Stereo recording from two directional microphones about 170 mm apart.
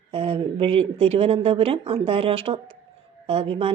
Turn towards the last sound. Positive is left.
turn(degrees=-35)  # may be behind; listen again after turning